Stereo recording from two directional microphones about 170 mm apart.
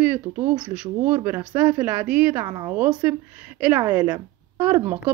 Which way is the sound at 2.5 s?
25° right (ahead or behind).